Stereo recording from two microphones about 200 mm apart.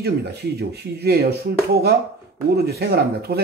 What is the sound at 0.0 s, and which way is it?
Speech, 55° right (ahead or behind).